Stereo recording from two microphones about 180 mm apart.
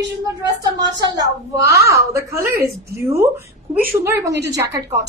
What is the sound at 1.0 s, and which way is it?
A woman's voice, 20° right (ahead or behind).